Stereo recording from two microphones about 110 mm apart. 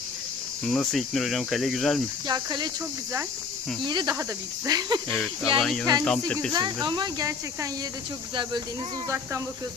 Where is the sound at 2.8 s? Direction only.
20° right (ahead or behind).